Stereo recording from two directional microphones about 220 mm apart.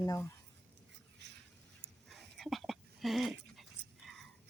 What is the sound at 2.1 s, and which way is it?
Dog, centre (ahead or behind).